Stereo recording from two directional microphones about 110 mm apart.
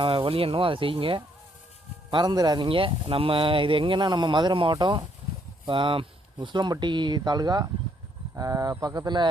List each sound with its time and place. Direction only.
0.0 s speech: 55° right (ahead or behind)
2.0 s a man's voice: 40° right (ahead or behind)
2.6 s a man's voice: 55° right (ahead or behind)